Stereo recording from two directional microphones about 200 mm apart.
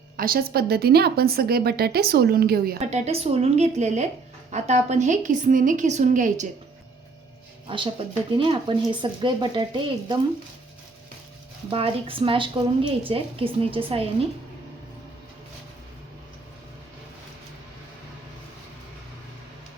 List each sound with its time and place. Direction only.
0.2 s a woman's voice: 50° right (ahead or behind)
2.8 s a woman's voice: 35° right (ahead or behind)
7.7 s speech: 25° right (ahead or behind)
11.7 s speech: 25° right (ahead or behind)